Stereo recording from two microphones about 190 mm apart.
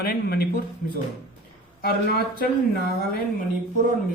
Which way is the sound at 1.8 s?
55° left (ahead or behind).